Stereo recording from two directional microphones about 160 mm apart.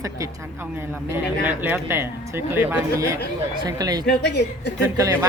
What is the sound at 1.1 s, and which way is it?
Speech, 10° right (ahead or behind).